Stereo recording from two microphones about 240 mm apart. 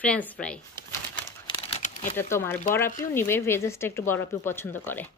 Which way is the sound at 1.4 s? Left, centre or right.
Left.